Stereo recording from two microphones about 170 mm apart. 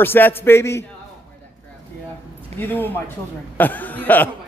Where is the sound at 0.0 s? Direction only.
10° left (ahead or behind).